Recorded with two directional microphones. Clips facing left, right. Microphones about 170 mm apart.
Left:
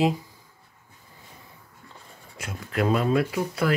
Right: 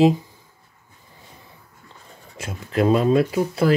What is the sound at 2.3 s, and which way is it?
Speech, 25° right (ahead or behind).